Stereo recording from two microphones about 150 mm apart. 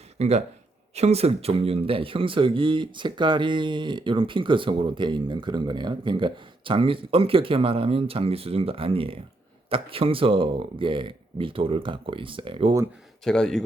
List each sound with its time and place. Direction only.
0.2 s a man's voice: 45° right (ahead or behind)
13.2 s speech: 5° left (ahead or behind)